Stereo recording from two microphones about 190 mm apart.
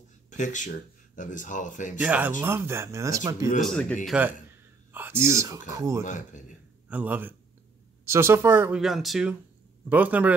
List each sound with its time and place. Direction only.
0.3 s speech: 40° left (ahead or behind)
2.0 s speech: 10° right (ahead or behind)
3.6 s speech: centre (ahead or behind)
4.9 s speech: 10° right (ahead or behind)
6.0 s a man's voice: 40° left (ahead or behind)
6.9 s speech: 10° right (ahead or behind)